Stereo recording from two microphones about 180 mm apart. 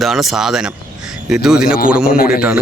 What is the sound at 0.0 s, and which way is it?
Speech, centre (ahead or behind).